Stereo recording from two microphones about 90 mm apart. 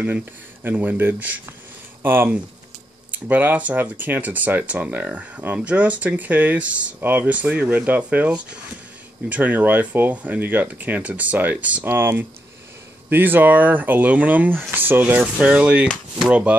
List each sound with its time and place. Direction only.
0.0 s speech: 20° right (ahead or behind)